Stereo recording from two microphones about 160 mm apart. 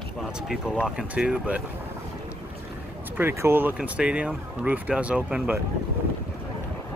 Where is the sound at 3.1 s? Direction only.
15° right (ahead or behind).